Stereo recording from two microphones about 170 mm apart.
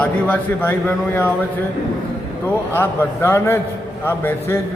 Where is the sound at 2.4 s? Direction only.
15° left (ahead or behind).